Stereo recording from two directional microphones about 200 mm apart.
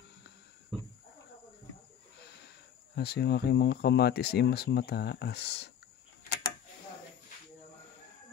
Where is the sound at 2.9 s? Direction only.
55° left (ahead or behind).